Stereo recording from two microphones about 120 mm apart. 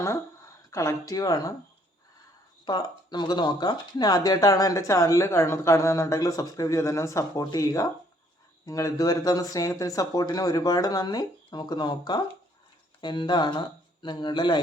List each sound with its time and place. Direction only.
0.7 s speech: 25° left (ahead or behind)
2.6 s speech: 35° left (ahead or behind)